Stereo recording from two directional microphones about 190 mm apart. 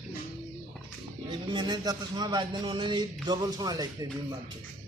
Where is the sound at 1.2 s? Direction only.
25° right (ahead or behind).